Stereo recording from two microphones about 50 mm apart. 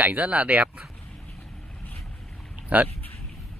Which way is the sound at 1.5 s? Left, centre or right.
Centre.